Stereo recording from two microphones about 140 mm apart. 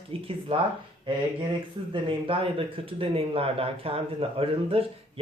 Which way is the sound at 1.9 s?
40° right (ahead or behind).